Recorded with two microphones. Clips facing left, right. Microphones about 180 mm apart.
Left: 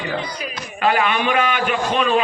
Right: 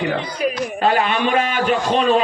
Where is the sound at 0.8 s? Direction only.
35° right (ahead or behind).